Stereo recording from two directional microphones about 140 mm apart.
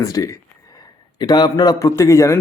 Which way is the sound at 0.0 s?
25° left (ahead or behind).